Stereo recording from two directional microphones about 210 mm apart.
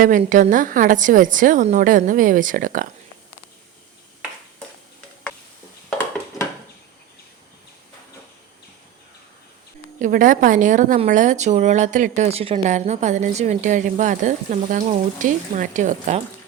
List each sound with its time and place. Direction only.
0.0 s speech: 40° right (ahead or behind)
10.0 s speech: 40° right (ahead or behind)